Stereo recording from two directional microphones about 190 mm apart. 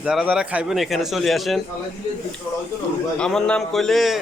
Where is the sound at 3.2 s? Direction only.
5° left (ahead or behind).